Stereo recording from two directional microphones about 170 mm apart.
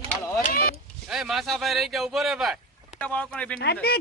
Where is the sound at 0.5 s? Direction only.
60° left (ahead or behind).